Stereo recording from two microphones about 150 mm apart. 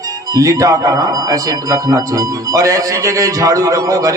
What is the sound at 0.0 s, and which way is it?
Speech, 25° right (ahead or behind).